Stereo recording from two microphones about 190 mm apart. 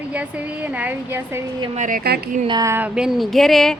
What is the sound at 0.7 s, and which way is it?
Speech, 10° right (ahead or behind).